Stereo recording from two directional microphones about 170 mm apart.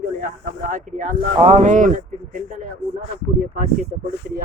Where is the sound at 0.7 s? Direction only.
50° right (ahead or behind).